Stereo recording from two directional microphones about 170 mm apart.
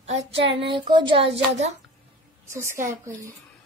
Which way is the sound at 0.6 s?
30° right (ahead or behind).